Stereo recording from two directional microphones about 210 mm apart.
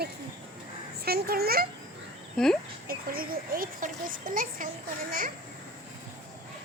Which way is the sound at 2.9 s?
45° right (ahead or behind).